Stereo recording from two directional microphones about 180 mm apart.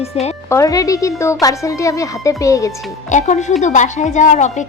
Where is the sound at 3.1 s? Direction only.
40° left (ahead or behind).